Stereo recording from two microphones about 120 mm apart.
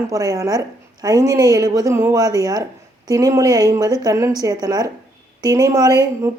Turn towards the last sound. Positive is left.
turn(degrees=-30)  # may be behind; listen again after turning